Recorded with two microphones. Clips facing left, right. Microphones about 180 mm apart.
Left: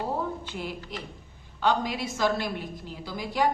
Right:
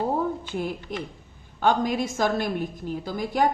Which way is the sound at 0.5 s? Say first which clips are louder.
Right 6 dB; 50° right (ahead or behind).